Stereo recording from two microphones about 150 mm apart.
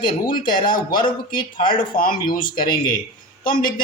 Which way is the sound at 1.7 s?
70° left (ahead or behind).